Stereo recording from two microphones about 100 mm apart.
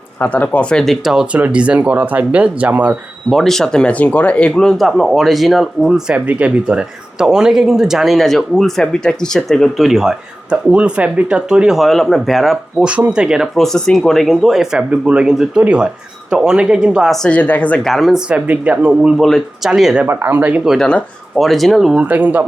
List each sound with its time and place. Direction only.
0.2 s speech: 15° left (ahead or behind); by 3.0 s 15° right (ahead or behind)
3.2 s speech: centre (ahead or behind)
12.9 s speech: 10° right (ahead or behind)
13.6 s speech: 5° left (ahead or behind)
17.2 s speech: 15° left (ahead or behind)
17.8 s speech: centre (ahead or behind)
18.3 s speech: 15° right (ahead or behind)
19.1 s speech: centre (ahead or behind)
20.1 s speech: 20° right (ahead or behind)
20.7 s speech: 5° left (ahead or behind)
22.0 s speech: 15° right (ahead or behind)